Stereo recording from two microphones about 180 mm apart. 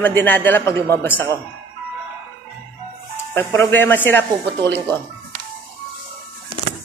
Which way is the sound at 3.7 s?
10° left (ahead or behind).